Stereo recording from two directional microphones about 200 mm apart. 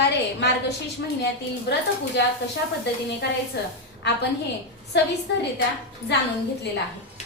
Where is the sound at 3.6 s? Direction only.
55° left (ahead or behind).